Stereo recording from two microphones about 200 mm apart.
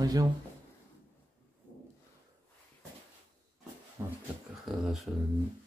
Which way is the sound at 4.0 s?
10° right (ahead or behind).